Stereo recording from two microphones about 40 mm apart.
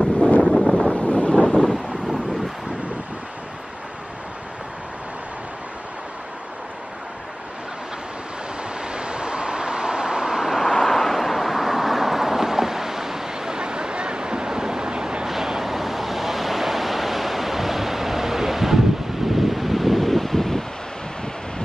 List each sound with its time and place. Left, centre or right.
0.2 s wind noise: left
1.5 s wind noise: centre
8.9 s vehicle: right
10.5 s vehicle: centre
13.6 s vehicle: right
15.2 s waves: centre